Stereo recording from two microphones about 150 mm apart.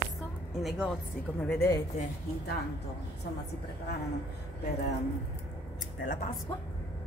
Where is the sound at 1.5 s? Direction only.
20° left (ahead or behind).